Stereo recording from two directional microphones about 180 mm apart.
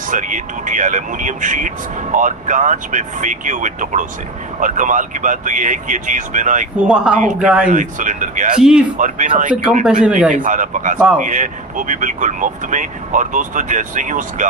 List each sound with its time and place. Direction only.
0.1 s speech: 45° right (ahead or behind)
6.8 s speech: 5° right (ahead or behind)
7.7 s speech: 45° right (ahead or behind)
9.8 s speech: 5° right (ahead or behind)
10.3 s speech: 45° right (ahead or behind)